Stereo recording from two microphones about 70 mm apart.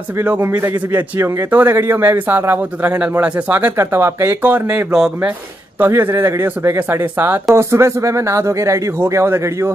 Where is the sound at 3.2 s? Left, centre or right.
Centre; by 4.5 s right.